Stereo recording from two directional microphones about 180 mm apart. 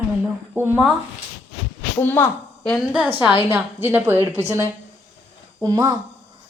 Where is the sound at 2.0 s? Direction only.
10° left (ahead or behind).